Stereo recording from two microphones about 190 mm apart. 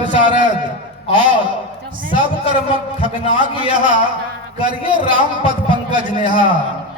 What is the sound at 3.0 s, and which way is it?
A man's voice, 25° right (ahead or behind).